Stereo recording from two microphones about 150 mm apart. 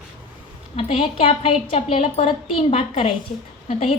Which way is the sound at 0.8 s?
40° left (ahead or behind).